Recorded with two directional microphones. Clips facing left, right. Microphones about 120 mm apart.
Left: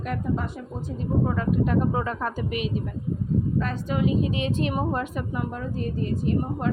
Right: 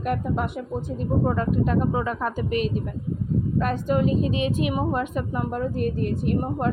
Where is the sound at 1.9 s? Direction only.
15° right (ahead or behind).